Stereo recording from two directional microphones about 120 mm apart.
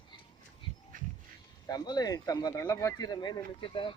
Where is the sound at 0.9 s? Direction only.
90° right.